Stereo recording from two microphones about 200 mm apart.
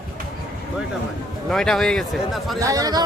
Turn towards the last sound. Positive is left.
turn(degrees=-20)  # may be behind; listen again after turning